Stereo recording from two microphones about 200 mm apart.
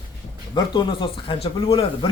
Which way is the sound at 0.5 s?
25° left (ahead or behind).